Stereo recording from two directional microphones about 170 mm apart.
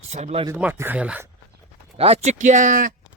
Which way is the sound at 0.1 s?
40° right (ahead or behind).